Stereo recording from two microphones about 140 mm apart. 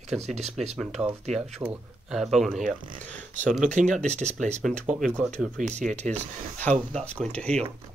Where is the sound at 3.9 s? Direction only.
55° right (ahead or behind).